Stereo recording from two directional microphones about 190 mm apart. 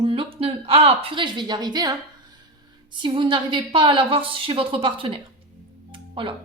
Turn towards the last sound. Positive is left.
turn(degrees=-25)  # may be behind; listen again after turning